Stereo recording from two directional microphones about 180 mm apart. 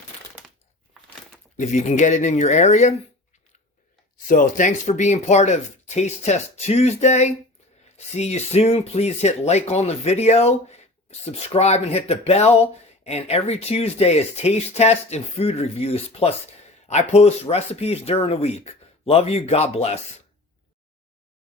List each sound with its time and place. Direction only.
1.5 s speech: 40° left (ahead or behind)
4.3 s speech: 45° left (ahead or behind)